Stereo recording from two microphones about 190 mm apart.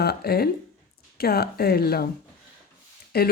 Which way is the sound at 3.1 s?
55° left (ahead or behind).